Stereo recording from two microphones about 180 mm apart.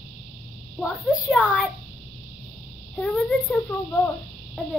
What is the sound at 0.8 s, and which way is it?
Speech, 5° right (ahead or behind).